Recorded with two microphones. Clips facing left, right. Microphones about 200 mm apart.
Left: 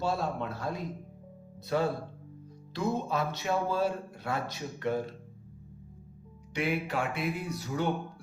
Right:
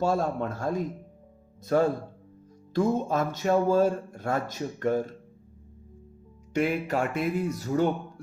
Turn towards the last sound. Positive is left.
turn(degrees=-45)  # may be behind; listen again after turning